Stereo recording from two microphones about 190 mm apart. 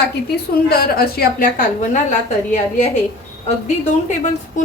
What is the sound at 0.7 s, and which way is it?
A woman's voice, 55° left (ahead or behind).